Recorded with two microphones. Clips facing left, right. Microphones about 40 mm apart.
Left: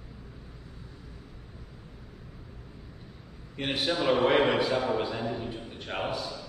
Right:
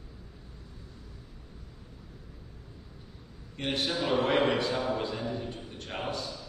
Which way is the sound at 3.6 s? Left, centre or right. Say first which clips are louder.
Left 2 dB; centre.